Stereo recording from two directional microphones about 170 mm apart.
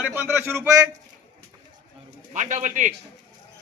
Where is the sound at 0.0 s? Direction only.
15° right (ahead or behind).